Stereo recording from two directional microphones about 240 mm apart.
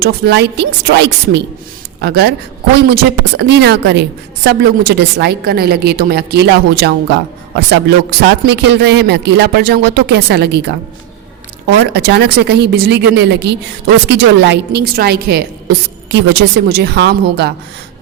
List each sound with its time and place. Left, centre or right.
0.0 s a woman's voice: right
11.8 s a woman's voice: right